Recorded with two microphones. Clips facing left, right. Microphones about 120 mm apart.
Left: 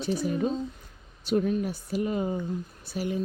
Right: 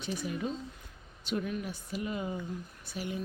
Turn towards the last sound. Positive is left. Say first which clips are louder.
# left 7 dB
turn(degrees=40)  # may be behind; listen again after turning